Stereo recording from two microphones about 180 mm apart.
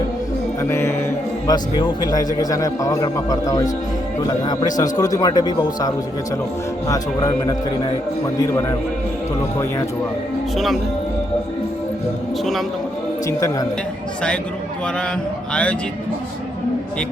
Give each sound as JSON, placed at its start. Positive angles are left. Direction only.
{"t": 0.7, "sound": "music", "side_deg": 15}
{"t": 1.5, "sound": "a man's voice", "side_deg": 25}
{"t": 13.2, "sound": "a man's voice", "side_deg": 20}